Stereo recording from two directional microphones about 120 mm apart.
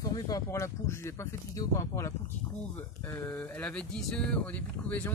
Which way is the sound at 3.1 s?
20° left (ahead or behind).